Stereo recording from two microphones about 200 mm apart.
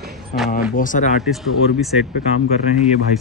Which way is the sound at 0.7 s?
40° left (ahead or behind).